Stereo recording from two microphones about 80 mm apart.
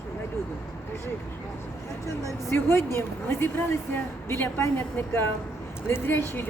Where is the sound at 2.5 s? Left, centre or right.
Left.